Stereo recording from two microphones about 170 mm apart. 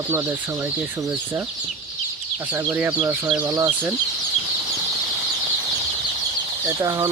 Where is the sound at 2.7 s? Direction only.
10° right (ahead or behind).